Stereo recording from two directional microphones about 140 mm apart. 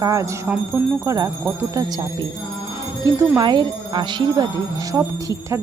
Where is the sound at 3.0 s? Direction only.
25° right (ahead or behind).